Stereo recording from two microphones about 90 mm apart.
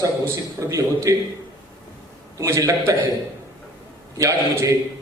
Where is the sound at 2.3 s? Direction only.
40° right (ahead or behind).